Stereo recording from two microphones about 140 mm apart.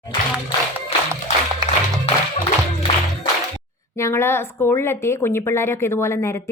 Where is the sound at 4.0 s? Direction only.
20° left (ahead or behind).